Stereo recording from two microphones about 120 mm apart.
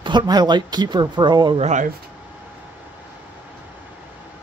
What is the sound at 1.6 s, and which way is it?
Speech, 75° right (ahead or behind).